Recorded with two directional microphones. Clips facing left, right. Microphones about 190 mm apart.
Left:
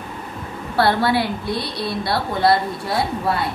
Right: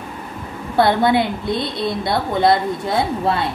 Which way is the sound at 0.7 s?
20° right (ahead or behind).